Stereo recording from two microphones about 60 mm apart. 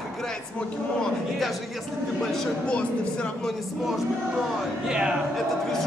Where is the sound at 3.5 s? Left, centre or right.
Centre.